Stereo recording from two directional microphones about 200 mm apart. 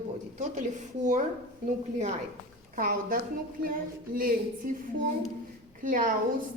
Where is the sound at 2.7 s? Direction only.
45° right (ahead or behind).